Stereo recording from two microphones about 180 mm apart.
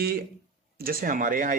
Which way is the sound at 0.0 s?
60° right (ahead or behind).